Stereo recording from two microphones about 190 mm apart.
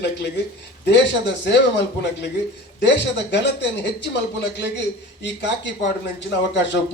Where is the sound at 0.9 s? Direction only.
70° left (ahead or behind).